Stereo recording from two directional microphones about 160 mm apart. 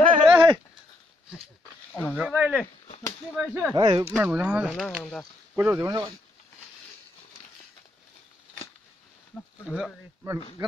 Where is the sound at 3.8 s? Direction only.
30° right (ahead or behind).